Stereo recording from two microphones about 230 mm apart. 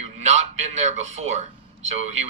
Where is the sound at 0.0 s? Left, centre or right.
Right.